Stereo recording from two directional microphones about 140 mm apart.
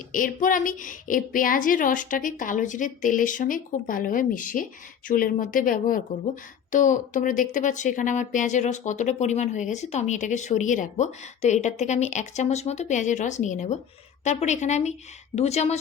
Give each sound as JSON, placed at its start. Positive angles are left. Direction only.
{"t": 0.1, "sound": "a woman's voice", "side_deg": 75}
{"t": 5.0, "sound": "speech", "side_deg": 85}
{"t": 6.2, "sound": "a woman's voice", "side_deg": 65}